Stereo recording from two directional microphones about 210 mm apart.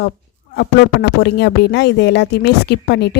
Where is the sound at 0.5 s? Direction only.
50° left (ahead or behind).